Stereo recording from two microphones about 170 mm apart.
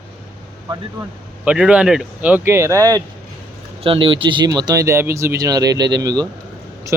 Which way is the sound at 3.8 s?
30° right (ahead or behind).